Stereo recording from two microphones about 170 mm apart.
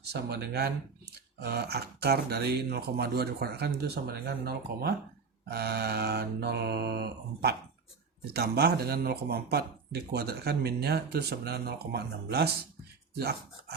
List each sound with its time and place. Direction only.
0.1 s speech: 75° right (ahead or behind)